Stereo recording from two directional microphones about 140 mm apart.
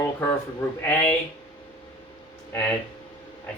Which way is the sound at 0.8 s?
15° left (ahead or behind).